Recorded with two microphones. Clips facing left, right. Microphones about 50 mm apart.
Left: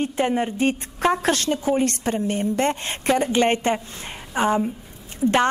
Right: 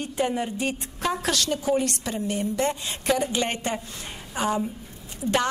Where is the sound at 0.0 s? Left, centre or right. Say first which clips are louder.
Left 4 dB; left.